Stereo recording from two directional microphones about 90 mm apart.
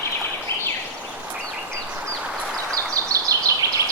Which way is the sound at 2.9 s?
40° right (ahead or behind).